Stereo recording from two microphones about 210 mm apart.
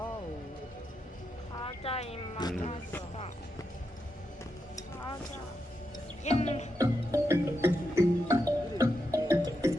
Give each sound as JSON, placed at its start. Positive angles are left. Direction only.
{"t": 1.5, "sound": "speech", "side_deg": 25}
{"t": 6.2, "sound": "speech", "side_deg": 30}
{"t": 6.7, "sound": "music", "side_deg": -15}